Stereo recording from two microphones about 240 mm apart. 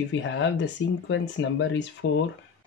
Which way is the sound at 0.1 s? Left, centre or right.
Left.